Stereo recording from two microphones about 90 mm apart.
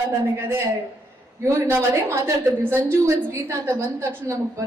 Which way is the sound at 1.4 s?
30° right (ahead or behind).